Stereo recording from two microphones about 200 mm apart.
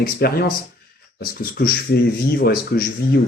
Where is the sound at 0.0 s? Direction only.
50° left (ahead or behind).